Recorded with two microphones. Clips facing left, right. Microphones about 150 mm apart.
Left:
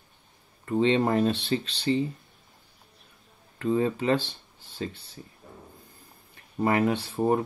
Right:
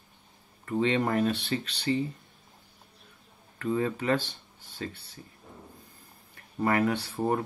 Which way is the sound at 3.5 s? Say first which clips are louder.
Left 3 dB; 25° left (ahead or behind).